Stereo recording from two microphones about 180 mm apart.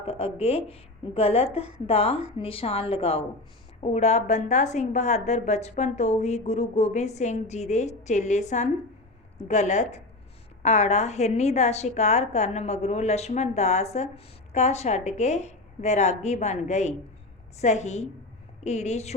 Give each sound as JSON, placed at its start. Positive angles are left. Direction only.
{"t": 0.0, "sound": "a woman's voice", "side_deg": 30}